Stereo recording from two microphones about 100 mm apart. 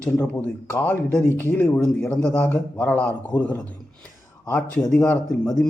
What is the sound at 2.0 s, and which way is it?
Speech, 10° left (ahead or behind).